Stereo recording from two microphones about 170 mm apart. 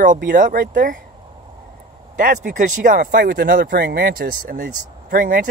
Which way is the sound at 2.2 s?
55° right (ahead or behind).